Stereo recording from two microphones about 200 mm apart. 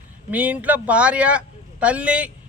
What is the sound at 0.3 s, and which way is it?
A man's voice, 5° right (ahead or behind).